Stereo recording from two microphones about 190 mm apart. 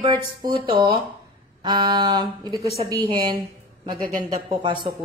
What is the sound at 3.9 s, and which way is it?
Speech, 50° right (ahead or behind).